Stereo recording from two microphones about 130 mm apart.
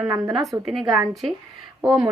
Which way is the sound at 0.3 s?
Centre (ahead or behind).